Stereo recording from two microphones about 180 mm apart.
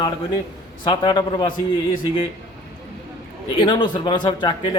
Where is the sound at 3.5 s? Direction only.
25° left (ahead or behind).